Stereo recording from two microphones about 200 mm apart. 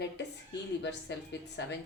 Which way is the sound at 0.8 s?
60° left (ahead or behind).